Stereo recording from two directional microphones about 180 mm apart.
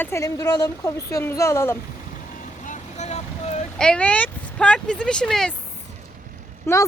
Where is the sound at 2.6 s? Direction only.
40° left (ahead or behind).